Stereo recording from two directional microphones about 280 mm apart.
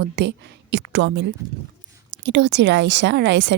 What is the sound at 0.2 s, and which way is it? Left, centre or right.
Speech, right.